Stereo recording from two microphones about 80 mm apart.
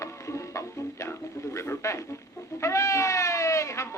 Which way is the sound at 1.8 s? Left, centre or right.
Left.